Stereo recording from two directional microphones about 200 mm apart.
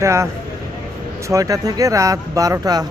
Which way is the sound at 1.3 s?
15° right (ahead or behind).